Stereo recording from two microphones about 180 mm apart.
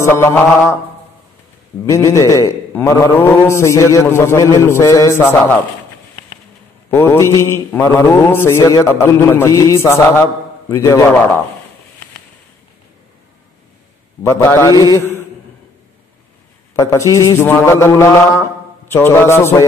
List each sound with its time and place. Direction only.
0.0 s a man's voice: 15° left (ahead or behind)
1.9 s a man's voice: 15° left (ahead or behind)
6.9 s a man's voice: 15° left (ahead or behind)
14.2 s a man's voice: 15° left (ahead or behind)
16.7 s a man's voice: 15° left (ahead or behind)